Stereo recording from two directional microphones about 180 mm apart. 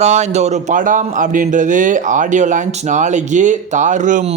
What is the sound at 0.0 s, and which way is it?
A man's voice, 40° right (ahead or behind).